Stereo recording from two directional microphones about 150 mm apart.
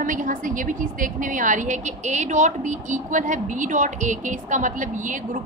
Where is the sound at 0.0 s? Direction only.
60° right (ahead or behind).